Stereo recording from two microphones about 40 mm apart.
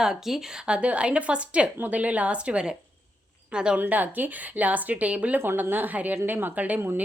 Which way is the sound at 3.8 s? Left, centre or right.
Right.